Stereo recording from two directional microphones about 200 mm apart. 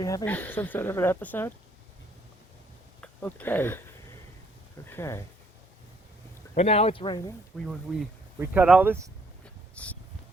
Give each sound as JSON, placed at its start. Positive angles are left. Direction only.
{"t": 0.0, "sound": "speech", "side_deg": 15}
{"t": 3.0, "sound": "speech", "side_deg": 5}
{"t": 4.9, "sound": "speech", "side_deg": 15}
{"t": 6.5, "sound": "speech", "side_deg": 30}
{"t": 7.6, "sound": "speech", "side_deg": 0}
{"t": 9.7, "sound": "a sound", "side_deg": 5}